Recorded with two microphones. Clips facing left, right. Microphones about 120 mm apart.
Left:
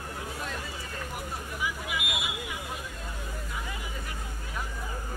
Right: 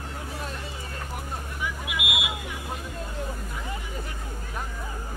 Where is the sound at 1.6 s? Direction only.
Centre (ahead or behind).